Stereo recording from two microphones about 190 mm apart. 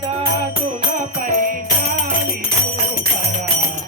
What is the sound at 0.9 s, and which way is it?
Music, 40° right (ahead or behind).